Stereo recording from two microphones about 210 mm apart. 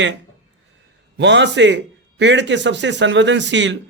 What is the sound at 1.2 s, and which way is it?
Speech, 55° right (ahead or behind).